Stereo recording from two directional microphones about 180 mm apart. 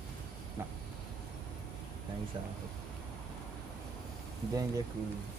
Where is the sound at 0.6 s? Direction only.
15° right (ahead or behind).